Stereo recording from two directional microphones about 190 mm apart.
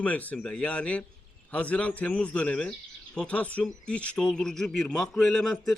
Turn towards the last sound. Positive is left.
turn(degrees=5)  # may be behind; listen again after turning